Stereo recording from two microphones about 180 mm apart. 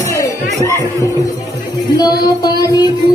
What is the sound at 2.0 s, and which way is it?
Music, 20° left (ahead or behind).